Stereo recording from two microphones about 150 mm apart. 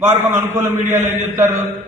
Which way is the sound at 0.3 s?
15° right (ahead or behind).